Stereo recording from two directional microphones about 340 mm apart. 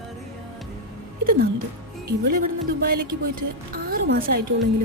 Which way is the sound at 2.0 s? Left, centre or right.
Right.